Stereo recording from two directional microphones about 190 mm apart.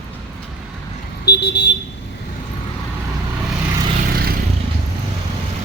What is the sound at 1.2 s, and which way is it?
Vehicle, 65° left (ahead or behind).